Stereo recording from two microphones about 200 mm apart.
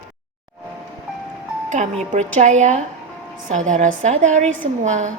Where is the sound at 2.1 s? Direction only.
35° right (ahead or behind).